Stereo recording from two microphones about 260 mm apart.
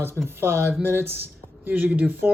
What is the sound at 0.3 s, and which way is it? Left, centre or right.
Speech, centre.